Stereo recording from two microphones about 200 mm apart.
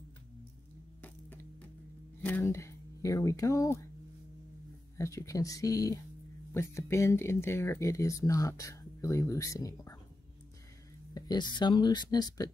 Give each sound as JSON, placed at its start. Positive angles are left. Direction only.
{"t": 1.0, "sound": "music", "side_deg": 10}
{"t": 2.2, "sound": "speech", "side_deg": 10}
{"t": 4.9, "sound": "speech", "side_deg": 15}
{"t": 11.1, "sound": "speech", "side_deg": 20}